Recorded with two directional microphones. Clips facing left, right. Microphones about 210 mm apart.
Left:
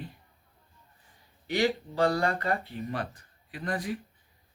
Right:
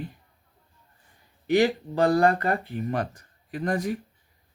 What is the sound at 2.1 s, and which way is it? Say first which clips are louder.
Speech: right 7 dB; 50° right (ahead or behind).